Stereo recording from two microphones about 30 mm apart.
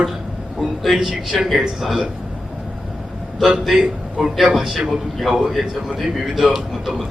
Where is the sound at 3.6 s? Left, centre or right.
Centre.